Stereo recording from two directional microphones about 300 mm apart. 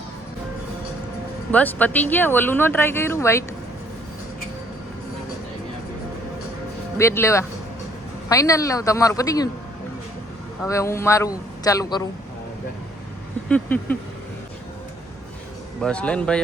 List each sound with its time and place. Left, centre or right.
1.5 s speech: centre
7.0 s speech: centre
10.7 s speech: centre
13.5 s speech: centre
15.8 s speech: centre